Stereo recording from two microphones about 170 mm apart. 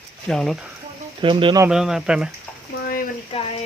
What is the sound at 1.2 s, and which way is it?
Speech, 30° right (ahead or behind).